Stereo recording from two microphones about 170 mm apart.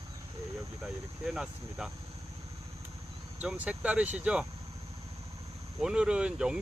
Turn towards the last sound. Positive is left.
turn(degrees=-5)  # may be behind; listen again after turning